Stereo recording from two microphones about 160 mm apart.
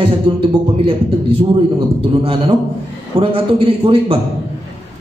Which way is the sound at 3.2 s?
35° right (ahead or behind).